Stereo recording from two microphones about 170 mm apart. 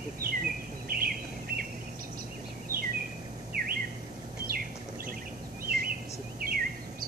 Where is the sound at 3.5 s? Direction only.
60° right (ahead or behind).